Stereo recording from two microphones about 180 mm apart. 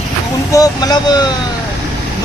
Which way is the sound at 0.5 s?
20° left (ahead or behind).